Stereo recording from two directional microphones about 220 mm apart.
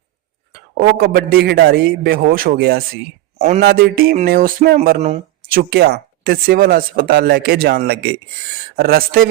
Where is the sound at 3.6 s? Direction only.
45° right (ahead or behind).